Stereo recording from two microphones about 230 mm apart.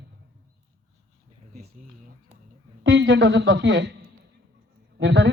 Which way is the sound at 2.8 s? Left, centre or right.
Right.